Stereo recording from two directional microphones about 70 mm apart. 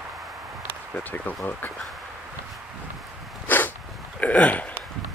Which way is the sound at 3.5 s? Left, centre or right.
Left.